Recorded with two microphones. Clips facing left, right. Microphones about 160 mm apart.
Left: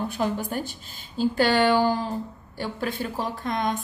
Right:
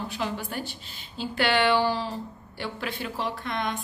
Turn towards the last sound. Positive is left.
turn(degrees=45)  # may be behind; listen again after turning